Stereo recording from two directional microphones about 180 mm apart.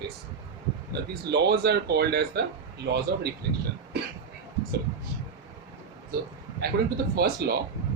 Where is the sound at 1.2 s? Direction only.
65° right (ahead or behind).